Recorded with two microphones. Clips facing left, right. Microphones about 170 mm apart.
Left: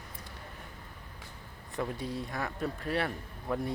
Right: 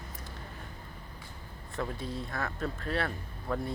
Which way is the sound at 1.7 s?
15° left (ahead or behind).